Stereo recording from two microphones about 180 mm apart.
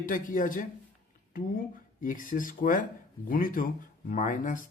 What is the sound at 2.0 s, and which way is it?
Speech, 50° left (ahead or behind).